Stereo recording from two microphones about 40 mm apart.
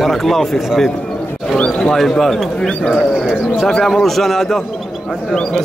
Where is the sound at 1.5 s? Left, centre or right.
Left.